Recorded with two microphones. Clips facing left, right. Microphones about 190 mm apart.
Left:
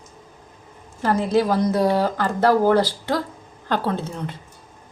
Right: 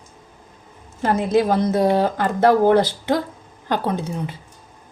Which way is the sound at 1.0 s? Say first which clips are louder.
Right 1 dB; 20° right (ahead or behind).